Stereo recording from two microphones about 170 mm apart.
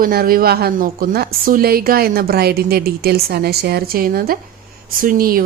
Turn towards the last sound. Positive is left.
turn(degrees=-60)  # may be behind; listen again after turning